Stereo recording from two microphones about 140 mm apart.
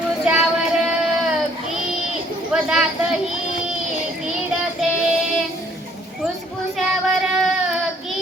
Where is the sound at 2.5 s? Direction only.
5° right (ahead or behind).